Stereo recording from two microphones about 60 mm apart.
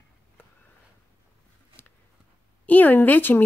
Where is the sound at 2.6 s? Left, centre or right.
Left.